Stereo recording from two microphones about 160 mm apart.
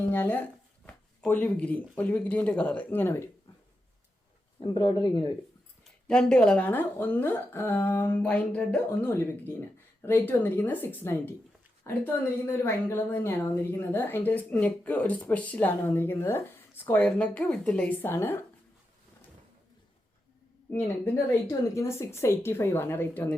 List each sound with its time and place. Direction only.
0.1 s a woman's voice: 10° left (ahead or behind)
4.6 s speech: 30° left (ahead or behind)
6.1 s a woman's voice: 5° left (ahead or behind)
20.7 s a woman's voice: 15° left (ahead or behind)